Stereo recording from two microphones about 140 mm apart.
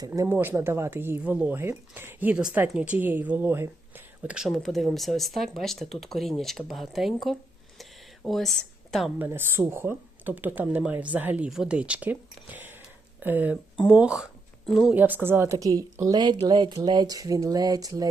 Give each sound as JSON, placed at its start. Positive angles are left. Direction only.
{"t": 0.1, "sound": "a woman's voice", "side_deg": -15}
{"t": 7.8, "sound": "a sound", "side_deg": 0}
{"t": 9.1, "sound": "a woman's voice", "side_deg": -15}
{"t": 14.9, "sound": "a woman's voice", "side_deg": -15}